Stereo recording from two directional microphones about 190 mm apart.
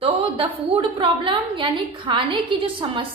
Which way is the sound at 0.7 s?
25° right (ahead or behind).